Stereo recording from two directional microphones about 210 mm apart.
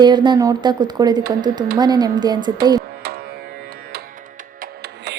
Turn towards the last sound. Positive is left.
turn(degrees=-55)  # may be behind; listen again after turning